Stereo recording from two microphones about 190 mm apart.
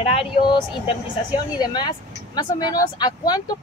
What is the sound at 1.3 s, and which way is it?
Speech, 20° left (ahead or behind).